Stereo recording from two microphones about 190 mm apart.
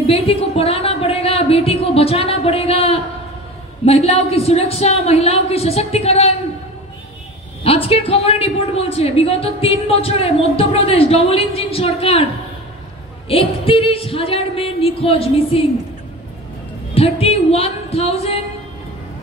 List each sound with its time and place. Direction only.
0.0 s a sound: 30° left (ahead or behind)
3.8 s a man's voice: 35° left (ahead or behind)
7.6 s a man's voice: 30° left (ahead or behind)
13.3 s singing: 30° left (ahead or behind)
16.9 s speech: 30° left (ahead or behind)